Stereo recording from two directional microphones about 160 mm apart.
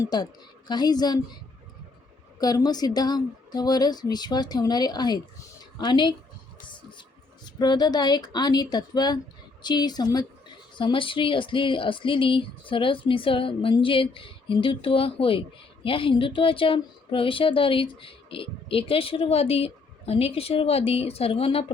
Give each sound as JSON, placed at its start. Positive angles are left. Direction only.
{"t": 0.0, "sound": "speech", "side_deg": 25}
{"t": 2.4, "sound": "speech", "side_deg": 25}
{"t": 7.4, "sound": "speech", "side_deg": 25}